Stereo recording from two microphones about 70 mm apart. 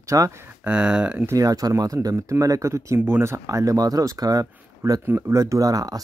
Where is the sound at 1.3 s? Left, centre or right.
Right.